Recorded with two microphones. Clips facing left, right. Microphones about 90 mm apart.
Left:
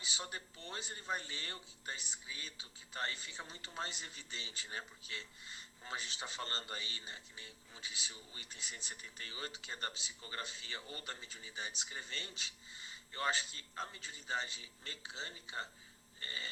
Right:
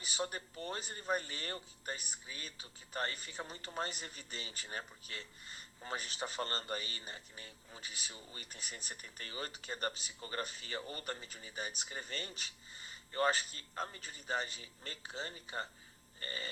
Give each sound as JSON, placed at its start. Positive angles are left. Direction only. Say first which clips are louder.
{"t": 0.0, "sound": "speech", "louder": "right 5 dB", "side_deg": -45}